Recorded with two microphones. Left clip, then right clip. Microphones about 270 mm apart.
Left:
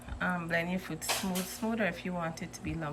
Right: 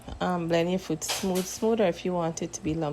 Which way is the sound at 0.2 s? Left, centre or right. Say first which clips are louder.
Right 6 dB; centre.